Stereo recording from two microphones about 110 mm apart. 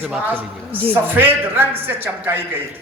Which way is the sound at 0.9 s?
20° right (ahead or behind).